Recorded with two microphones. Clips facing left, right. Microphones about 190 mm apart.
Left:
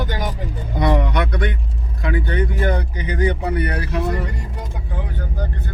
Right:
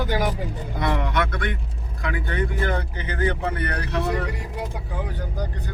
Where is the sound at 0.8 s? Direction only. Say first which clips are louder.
Left 5 dB; 20° left (ahead or behind).